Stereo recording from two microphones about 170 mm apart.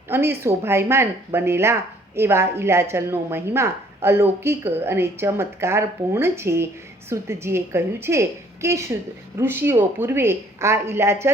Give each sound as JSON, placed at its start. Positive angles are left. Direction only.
{"t": 0.1, "sound": "speech", "side_deg": -15}